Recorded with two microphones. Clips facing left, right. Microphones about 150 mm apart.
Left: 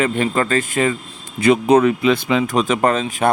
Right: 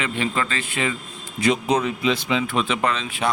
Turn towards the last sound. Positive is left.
turn(degrees=45)  # may be behind; listen again after turning